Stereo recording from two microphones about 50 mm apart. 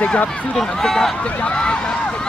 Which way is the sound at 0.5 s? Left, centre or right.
Centre.